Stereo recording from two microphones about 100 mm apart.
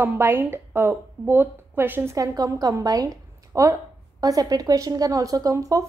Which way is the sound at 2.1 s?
35° right (ahead or behind).